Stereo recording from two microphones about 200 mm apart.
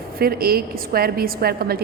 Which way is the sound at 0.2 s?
50° right (ahead or behind).